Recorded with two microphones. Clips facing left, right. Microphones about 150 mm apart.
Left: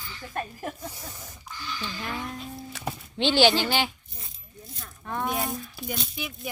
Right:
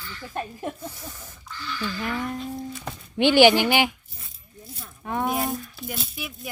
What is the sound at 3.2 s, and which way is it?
Speech, 15° right (ahead or behind).